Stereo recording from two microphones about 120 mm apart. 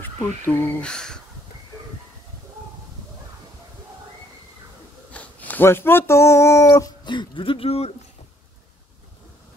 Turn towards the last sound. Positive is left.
turn(degrees=55)  # may be behind; listen again after turning